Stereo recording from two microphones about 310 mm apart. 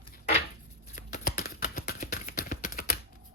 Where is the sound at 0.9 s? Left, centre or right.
Left.